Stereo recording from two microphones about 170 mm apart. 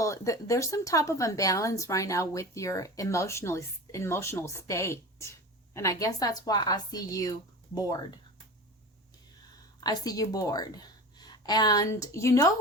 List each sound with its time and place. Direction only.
0.0 s a woman's voice: 20° left (ahead or behind)
9.8 s a woman's voice: 25° left (ahead or behind)